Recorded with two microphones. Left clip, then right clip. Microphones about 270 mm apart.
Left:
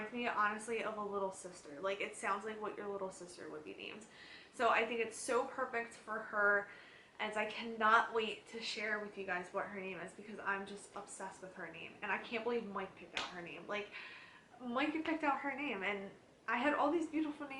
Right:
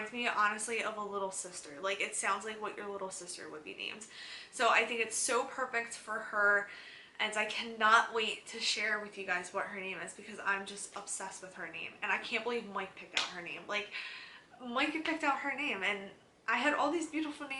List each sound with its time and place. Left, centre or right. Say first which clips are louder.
0.0 s a woman's voice: right 4 dB; centre
0.9 s speech: right 2 dB; centre
1.8 s a woman's voice: right 5 dB; centre